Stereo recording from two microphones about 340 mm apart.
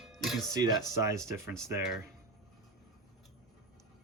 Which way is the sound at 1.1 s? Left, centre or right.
Centre.